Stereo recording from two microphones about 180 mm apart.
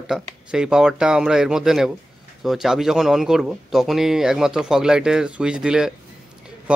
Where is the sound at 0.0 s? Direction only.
5° right (ahead or behind).